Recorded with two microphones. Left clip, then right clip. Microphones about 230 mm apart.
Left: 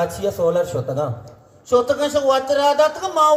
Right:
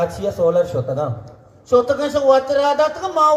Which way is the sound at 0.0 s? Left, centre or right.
Left.